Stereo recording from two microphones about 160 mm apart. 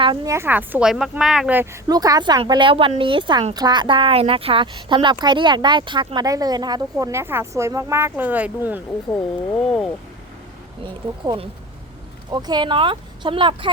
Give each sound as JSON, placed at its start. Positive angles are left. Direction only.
{"t": 0.3, "sound": "speech", "side_deg": -15}
{"t": 1.5, "sound": "speech", "side_deg": -20}
{"t": 9.1, "sound": "speech", "side_deg": 5}
{"t": 10.8, "sound": "speech", "side_deg": -30}